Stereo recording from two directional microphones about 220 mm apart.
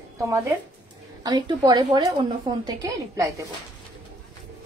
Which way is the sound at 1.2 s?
20° right (ahead or behind).